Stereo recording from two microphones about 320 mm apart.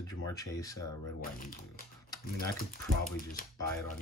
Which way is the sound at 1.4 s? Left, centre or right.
Left.